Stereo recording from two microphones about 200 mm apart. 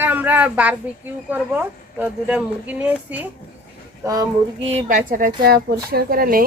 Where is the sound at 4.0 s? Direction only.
15° right (ahead or behind).